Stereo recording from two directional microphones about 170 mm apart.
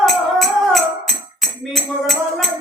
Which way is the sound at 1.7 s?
Centre (ahead or behind).